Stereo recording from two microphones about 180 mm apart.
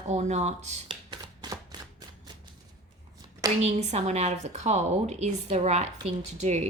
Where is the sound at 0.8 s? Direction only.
25° right (ahead or behind).